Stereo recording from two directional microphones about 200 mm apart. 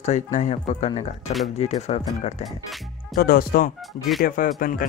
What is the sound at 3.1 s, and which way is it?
Speech, 50° left (ahead or behind).